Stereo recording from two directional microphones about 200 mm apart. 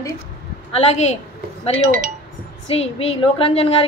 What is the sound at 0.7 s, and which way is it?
Speech, 35° left (ahead or behind).